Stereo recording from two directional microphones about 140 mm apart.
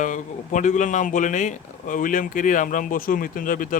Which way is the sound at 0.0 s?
65° left (ahead or behind).